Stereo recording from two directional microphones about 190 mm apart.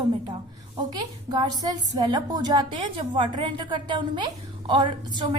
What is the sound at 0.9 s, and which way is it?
A woman's voice, 20° right (ahead or behind).